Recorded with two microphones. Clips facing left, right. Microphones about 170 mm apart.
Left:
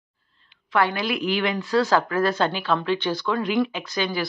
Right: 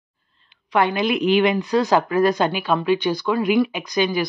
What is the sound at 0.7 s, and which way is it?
Speech, 20° right (ahead or behind).